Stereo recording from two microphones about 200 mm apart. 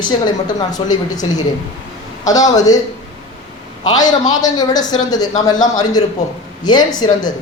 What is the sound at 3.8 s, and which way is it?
Speech, 20° left (ahead or behind).